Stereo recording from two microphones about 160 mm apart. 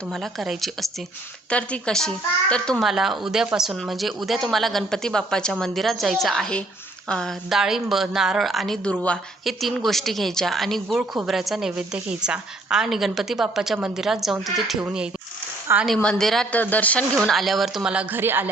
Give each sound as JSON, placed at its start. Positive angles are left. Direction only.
{"t": 0.1, "sound": "a woman's voice", "side_deg": 0}
{"t": 16.0, "sound": "a woman's voice", "side_deg": 5}